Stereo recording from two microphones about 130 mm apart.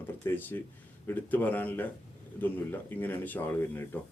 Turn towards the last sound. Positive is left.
turn(degrees=15)  # may be behind; listen again after turning